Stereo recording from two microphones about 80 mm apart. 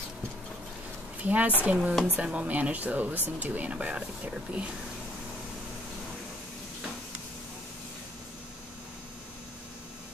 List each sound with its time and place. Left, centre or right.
1.2 s a woman's voice: centre